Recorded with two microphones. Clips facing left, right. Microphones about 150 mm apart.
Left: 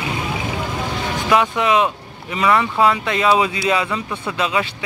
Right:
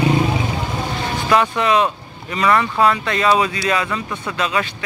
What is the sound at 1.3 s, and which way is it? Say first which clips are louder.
Speech: even; 10° left (ahead or behind).